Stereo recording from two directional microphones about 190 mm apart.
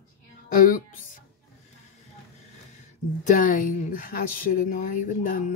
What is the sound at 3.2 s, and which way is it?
A woman's voice, 45° left (ahead or behind).